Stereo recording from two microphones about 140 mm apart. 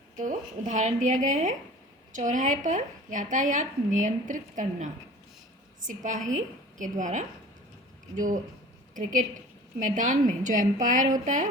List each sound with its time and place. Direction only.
0.2 s speech: 65° right (ahead or behind)
9.0 s a woman's voice: 65° right (ahead or behind)